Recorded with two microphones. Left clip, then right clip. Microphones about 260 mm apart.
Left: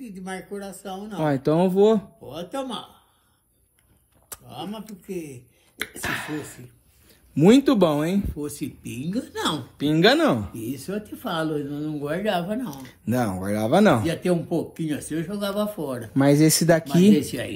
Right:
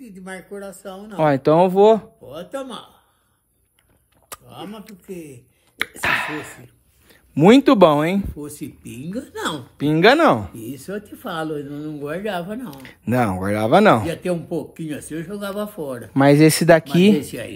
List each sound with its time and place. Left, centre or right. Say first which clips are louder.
0.2 s speech: right 1 dB; centre
1.1 s speech: right 7 dB; right
2.2 s speech: right 1 dB; centre
4.3 s a sound: right 6 dB; right
5.0 s speech: left 2 dB; centre
5.8 s speech: right 8 dB; right
8.3 s speech: left 1 dB; centre
9.8 s speech: right 5 dB; right
11.1 s speech: even; centre
12.7 s speech: right 10 dB; right
14.0 s speech: even; centre
16.1 s speech: right 5 dB; right
17.3 s speech: even; centre